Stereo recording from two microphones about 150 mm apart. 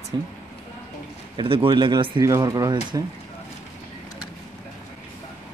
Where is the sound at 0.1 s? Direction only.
30° right (ahead or behind).